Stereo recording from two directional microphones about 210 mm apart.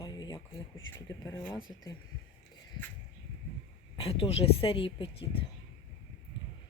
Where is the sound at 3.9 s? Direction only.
25° left (ahead or behind).